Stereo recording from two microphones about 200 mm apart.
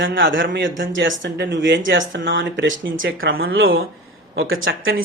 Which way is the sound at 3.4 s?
85° right.